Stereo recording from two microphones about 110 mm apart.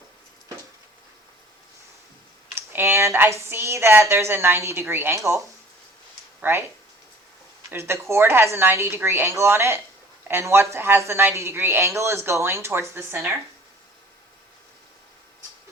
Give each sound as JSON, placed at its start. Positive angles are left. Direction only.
{"t": 2.6, "sound": "speech", "side_deg": -20}
{"t": 6.4, "sound": "speech", "side_deg": -20}
{"t": 7.7, "sound": "speech", "side_deg": -20}